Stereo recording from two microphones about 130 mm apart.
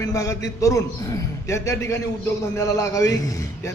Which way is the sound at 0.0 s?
25° left (ahead or behind).